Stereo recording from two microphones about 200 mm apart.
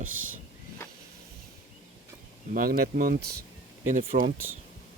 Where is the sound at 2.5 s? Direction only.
45° right (ahead or behind).